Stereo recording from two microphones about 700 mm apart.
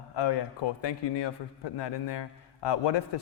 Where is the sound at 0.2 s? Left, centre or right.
Left.